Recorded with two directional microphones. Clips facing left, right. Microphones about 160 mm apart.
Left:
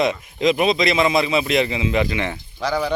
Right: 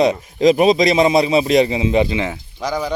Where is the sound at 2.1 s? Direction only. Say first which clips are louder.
Right 3 dB; 15° right (ahead or behind).